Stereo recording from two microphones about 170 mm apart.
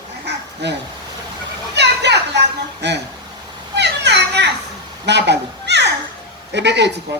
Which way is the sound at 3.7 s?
90° right.